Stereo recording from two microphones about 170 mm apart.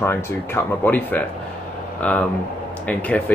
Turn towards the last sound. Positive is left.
turn(degrees=10)  # may be behind; listen again after turning